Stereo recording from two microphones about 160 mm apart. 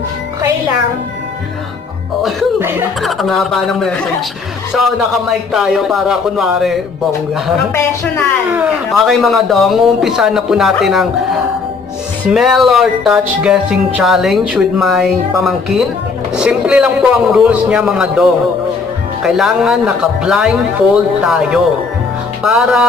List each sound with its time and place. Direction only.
3.0 s speech: centre (ahead or behind)
7.7 s speech: 15° left (ahead or behind)
8.5 s speech: 10° right (ahead or behind)
8.9 s speech: centre (ahead or behind)
12.3 s speech: centre (ahead or behind)